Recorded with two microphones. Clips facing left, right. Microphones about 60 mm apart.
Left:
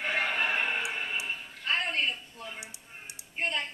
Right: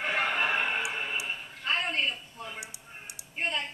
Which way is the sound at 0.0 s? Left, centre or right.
Right.